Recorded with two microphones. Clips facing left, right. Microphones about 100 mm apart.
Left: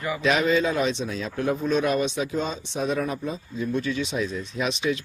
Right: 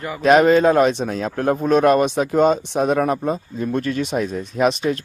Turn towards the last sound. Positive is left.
turn(degrees=-45)  # may be behind; listen again after turning